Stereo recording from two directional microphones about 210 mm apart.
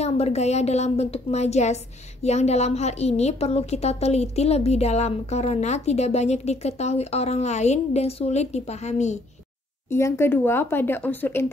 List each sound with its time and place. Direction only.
0.0 s a woman's voice: 30° left (ahead or behind)
9.8 s speech: 10° left (ahead or behind)